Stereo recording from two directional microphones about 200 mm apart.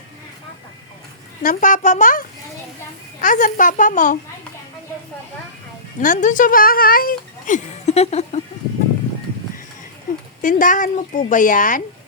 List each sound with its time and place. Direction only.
1.4 s speech: 40° left (ahead or behind)
6.0 s speech: 40° left (ahead or behind)
10.4 s speech: 40° left (ahead or behind)